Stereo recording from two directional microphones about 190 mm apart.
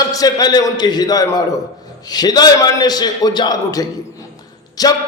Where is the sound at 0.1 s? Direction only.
20° left (ahead or behind).